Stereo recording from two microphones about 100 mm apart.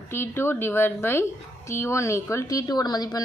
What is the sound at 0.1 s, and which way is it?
A woman's voice, 25° left (ahead or behind).